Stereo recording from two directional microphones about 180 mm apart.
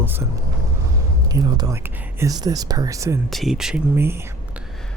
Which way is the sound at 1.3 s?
20° right (ahead or behind).